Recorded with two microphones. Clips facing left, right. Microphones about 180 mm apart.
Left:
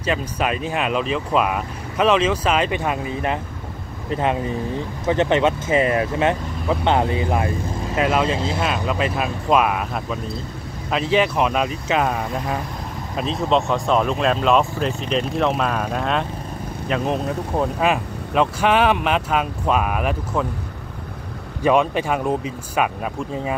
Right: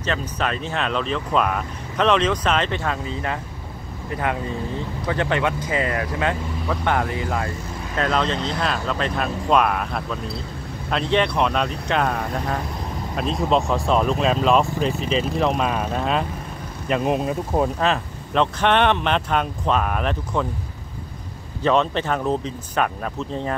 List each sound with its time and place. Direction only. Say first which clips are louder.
0.0 s speech: left 2 dB; 10° left (ahead or behind)
17.7 s speech: left 2 dB; 10° left (ahead or behind)
21.6 s speech: left 2 dB; 10° left (ahead or behind)